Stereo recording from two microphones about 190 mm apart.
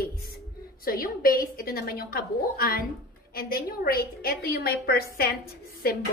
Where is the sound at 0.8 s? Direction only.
50° left (ahead or behind).